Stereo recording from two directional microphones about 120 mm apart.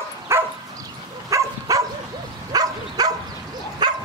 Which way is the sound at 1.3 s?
25° right (ahead or behind).